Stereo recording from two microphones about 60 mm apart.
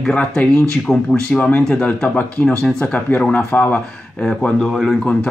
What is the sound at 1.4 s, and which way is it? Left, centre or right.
Speech, left.